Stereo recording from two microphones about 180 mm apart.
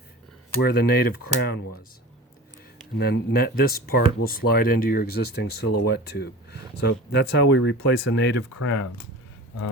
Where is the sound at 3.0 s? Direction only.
60° left (ahead or behind); by 8.9 s 80° left.